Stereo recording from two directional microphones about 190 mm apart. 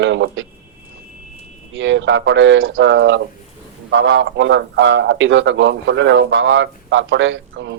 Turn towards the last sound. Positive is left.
turn(degrees=-65)  # may be behind; listen again after turning